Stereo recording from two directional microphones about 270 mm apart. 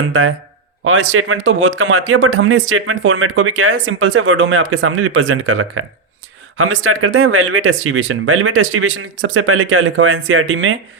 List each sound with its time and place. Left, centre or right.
0.1 s speech: right